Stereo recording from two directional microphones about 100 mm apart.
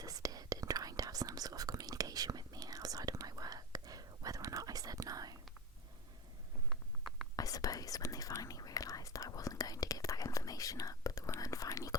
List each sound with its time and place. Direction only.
0.0 s whispering: 40° right (ahead or behind)
6.7 s a sound: centre (ahead or behind)
7.3 s whispering: 35° left (ahead or behind)